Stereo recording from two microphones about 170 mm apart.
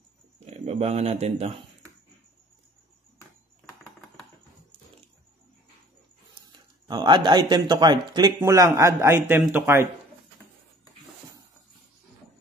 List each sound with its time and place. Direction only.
0.5 s speech: 40° right (ahead or behind)
6.5 s speech: 25° right (ahead or behind)